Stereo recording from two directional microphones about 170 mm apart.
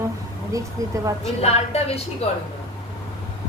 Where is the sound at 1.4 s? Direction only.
40° left (ahead or behind).